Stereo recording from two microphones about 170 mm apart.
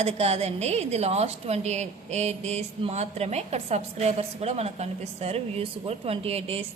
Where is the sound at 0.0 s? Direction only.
35° right (ahead or behind).